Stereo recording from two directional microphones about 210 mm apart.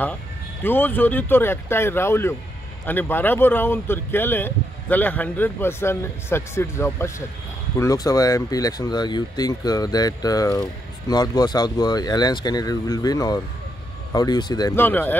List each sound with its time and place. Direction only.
0.7 s speech: 10° left (ahead or behind)